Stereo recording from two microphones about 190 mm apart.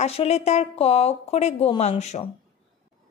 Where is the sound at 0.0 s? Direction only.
35° left (ahead or behind).